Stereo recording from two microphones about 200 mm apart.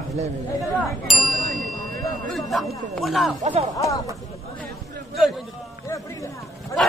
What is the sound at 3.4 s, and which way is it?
Speech, 30° right (ahead or behind).